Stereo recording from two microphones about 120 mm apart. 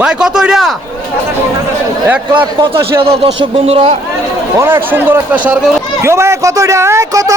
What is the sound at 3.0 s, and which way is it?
Speech, 50° right (ahead or behind).